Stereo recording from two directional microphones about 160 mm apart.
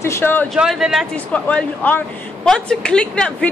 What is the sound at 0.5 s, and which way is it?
Speech, centre (ahead or behind).